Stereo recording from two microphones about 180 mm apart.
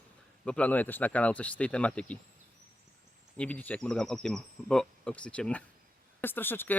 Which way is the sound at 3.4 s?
10° left (ahead or behind).